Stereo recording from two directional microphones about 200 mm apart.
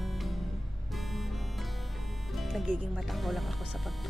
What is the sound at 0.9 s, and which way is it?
Music, centre (ahead or behind).